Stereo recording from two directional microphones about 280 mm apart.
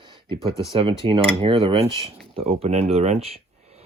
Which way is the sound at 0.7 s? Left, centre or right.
Centre.